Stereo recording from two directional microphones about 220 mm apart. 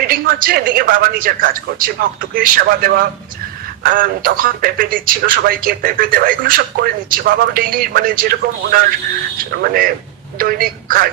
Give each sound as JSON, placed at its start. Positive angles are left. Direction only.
{"t": 0.1, "sound": "speech", "side_deg": -40}